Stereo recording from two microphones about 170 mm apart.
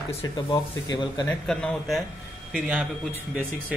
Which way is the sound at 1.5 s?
5° left (ahead or behind).